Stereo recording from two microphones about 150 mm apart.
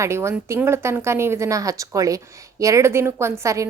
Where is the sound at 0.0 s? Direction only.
20° right (ahead or behind).